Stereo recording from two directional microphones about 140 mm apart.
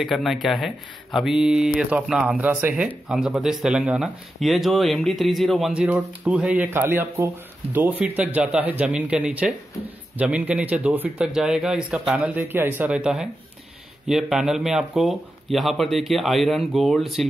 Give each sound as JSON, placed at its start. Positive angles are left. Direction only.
{"t": 0.0, "sound": "speech", "side_deg": 0}
{"t": 12.2, "sound": "speech", "side_deg": -15}